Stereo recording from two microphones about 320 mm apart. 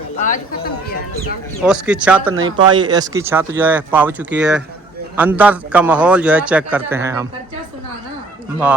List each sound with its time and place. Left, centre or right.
0.2 s speech: left
1.6 s a man's voice: centre